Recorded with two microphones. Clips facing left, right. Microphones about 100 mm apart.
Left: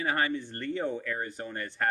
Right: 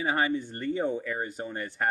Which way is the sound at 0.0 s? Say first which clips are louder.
Right 2 dB; 15° right (ahead or behind).